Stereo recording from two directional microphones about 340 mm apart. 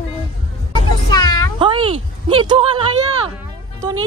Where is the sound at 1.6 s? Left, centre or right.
Centre.